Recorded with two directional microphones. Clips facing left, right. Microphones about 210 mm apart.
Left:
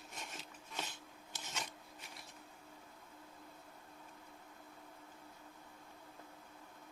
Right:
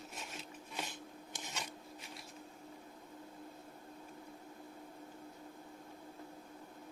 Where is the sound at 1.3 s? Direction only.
10° right (ahead or behind).